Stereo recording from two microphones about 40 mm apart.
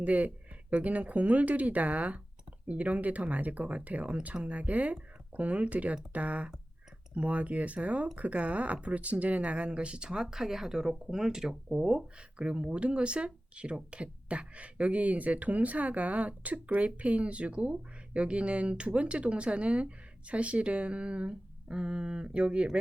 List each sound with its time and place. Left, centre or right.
0.0 s speech: right